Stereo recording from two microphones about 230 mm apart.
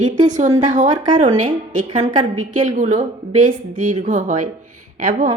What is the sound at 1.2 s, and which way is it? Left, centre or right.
Speech, right.